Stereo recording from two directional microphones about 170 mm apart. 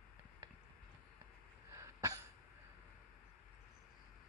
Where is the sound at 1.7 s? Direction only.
20° right (ahead or behind).